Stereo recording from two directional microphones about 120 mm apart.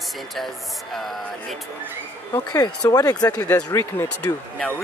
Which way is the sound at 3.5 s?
25° left (ahead or behind).